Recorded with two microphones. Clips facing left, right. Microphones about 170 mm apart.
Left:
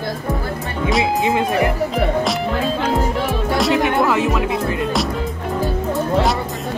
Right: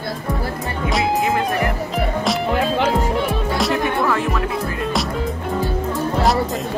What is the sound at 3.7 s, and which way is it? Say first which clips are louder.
Music: left 4 dB; 20° left (ahead or behind).